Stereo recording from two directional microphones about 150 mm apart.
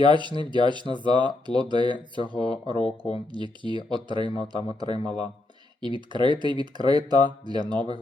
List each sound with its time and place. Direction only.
0.0 s speech: 30° right (ahead or behind)